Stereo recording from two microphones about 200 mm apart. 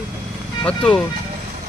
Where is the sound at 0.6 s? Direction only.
5° left (ahead or behind).